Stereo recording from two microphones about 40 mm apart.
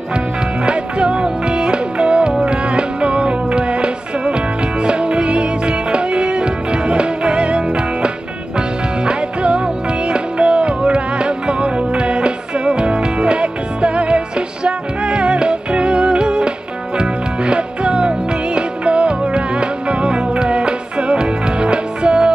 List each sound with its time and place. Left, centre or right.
0.7 s music: right